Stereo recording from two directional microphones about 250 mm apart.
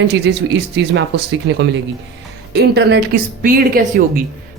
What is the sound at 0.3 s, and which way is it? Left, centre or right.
Speech, right.